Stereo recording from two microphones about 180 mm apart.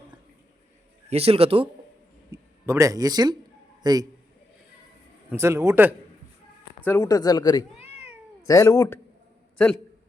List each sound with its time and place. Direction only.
1.1 s a man's voice: 35° right (ahead or behind)
2.3 s a man's voice: 15° right (ahead or behind)
5.3 s a man's voice: 15° right (ahead or behind)
6.8 s speech: 20° left (ahead or behind)